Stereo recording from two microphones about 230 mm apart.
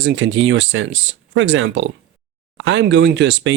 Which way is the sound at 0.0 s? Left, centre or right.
Right.